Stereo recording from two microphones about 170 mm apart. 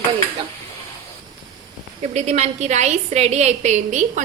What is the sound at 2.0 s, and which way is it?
A woman's voice, 40° right (ahead or behind).